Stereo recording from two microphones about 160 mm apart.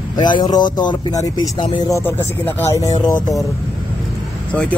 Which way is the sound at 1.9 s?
15° left (ahead or behind).